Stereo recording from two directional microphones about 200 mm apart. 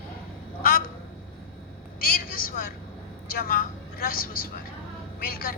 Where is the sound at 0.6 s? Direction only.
45° left (ahead or behind).